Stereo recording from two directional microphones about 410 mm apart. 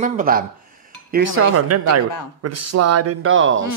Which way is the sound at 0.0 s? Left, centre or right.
Right.